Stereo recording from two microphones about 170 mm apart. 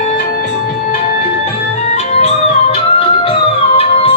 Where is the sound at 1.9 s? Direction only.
40° left (ahead or behind).